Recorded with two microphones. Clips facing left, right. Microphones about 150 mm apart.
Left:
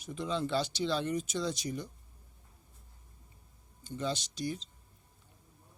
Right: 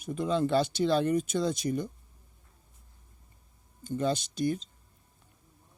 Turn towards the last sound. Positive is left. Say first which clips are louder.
# right 7 dB
turn(degrees=-55)  # may be behind; listen again after turning